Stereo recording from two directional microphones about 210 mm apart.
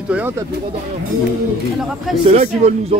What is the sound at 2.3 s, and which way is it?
Speech, 30° right (ahead or behind).